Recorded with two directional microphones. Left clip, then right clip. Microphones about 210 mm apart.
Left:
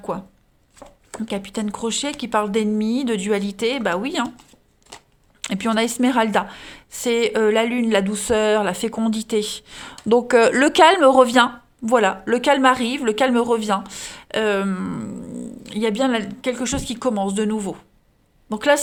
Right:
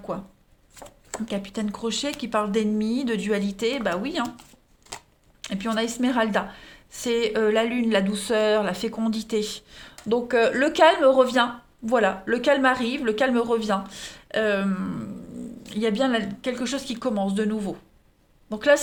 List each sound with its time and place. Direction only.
0.1 s speech: 35° left (ahead or behind)
1.3 s speech: 30° left (ahead or behind)
5.4 s speech: 40° left (ahead or behind)